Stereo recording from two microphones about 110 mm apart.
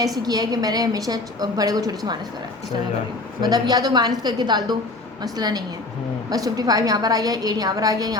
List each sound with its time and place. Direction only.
0.2 s a woman's voice: 35° right (ahead or behind)
3.4 s a woman's voice: 40° right (ahead or behind)